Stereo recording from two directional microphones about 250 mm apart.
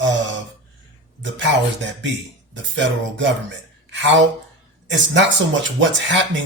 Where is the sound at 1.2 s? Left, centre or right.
Right.